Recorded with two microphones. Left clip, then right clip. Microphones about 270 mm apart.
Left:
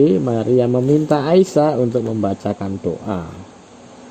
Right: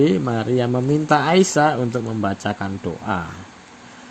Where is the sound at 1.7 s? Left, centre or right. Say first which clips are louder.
Left 5 dB; centre.